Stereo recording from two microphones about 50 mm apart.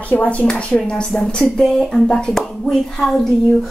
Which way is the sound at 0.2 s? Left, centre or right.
Left.